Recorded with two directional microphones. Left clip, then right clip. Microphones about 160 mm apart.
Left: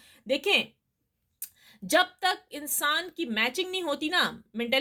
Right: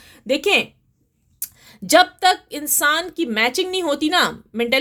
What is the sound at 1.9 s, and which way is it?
Speech, 30° right (ahead or behind).